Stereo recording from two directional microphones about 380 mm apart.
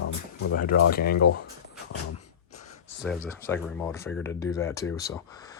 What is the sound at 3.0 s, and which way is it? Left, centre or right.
Speech, centre.